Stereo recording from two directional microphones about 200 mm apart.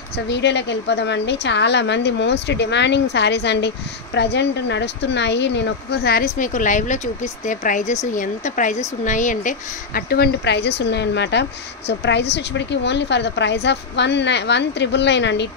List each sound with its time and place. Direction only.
0.3 s a woman's voice: 60° left (ahead or behind)